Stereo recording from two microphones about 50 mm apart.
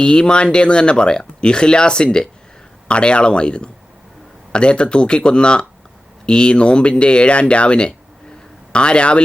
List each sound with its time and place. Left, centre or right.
0.0 s speech: centre